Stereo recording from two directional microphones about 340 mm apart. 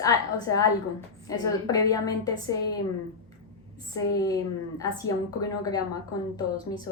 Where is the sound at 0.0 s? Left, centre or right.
Centre.